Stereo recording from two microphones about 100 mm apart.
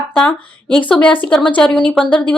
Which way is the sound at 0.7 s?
10° left (ahead or behind).